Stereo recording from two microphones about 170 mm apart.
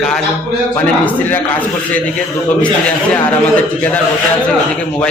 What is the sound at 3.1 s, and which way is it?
Speech, 10° left (ahead or behind).